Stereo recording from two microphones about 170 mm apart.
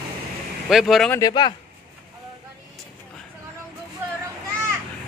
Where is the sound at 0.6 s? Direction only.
Centre (ahead or behind).